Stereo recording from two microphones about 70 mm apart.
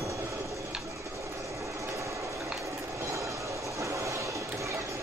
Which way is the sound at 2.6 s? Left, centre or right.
Right.